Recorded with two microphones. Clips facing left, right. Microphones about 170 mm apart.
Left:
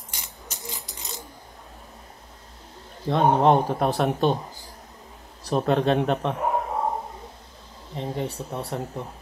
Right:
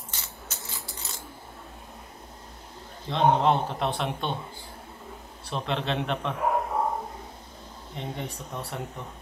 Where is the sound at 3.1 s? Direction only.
45° left (ahead or behind).